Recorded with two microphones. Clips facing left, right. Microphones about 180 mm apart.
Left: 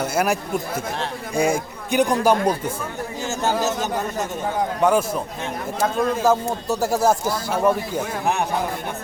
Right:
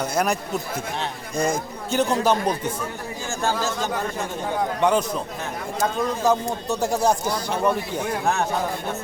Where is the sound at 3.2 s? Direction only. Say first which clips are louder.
Left 3 dB; 20° left (ahead or behind).